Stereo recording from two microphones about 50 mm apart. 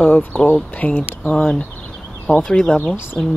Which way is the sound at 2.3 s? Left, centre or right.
Centre.